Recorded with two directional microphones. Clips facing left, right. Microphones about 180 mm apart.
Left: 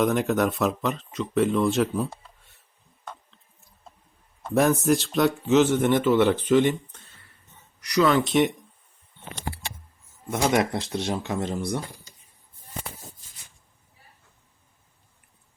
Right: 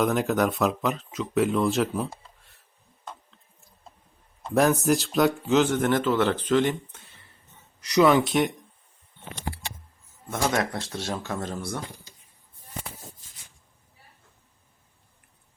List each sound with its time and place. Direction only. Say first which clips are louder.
0.0 s speech: left 1 dB; centre (ahead or behind)
4.4 s speech: left 1 dB; centre (ahead or behind)
7.8 s speech: right 2 dB; 25° right (ahead or behind)
8.3 s speech: left 3 dB; centre (ahead or behind)
10.2 s speech: left 3 dB; 15° left (ahead or behind)